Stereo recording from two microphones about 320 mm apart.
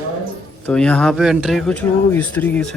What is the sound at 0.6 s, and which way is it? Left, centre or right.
Speech, centre.